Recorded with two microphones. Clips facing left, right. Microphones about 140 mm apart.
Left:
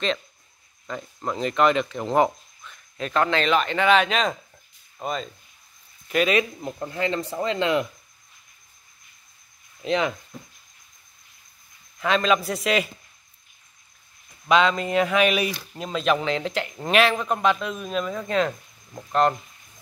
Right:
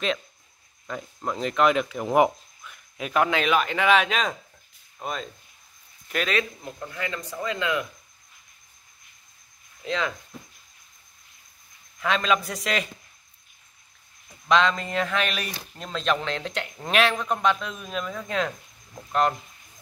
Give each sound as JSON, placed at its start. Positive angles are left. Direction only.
{"t": 0.8, "sound": "speech", "side_deg": 0}
{"t": 6.8, "sound": "speech", "side_deg": 30}
{"t": 9.8, "sound": "speech", "side_deg": 20}
{"t": 12.0, "sound": "speech", "side_deg": 0}
{"t": 14.5, "sound": "speech", "side_deg": 5}